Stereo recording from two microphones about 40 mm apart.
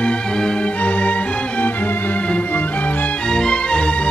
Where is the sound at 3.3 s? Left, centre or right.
Left.